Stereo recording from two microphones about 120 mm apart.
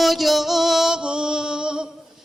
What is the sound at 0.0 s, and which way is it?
Music, centre (ahead or behind).